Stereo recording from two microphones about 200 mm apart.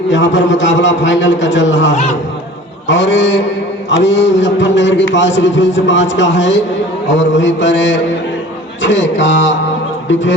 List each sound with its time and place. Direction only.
0.1 s a man's voice: 65° left (ahead or behind)
1.9 s speech: 35° left (ahead or behind)
2.8 s a man's voice: 65° left (ahead or behind)